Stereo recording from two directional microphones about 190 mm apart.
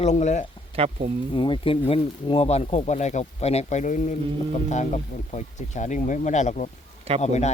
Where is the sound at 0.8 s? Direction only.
30° right (ahead or behind).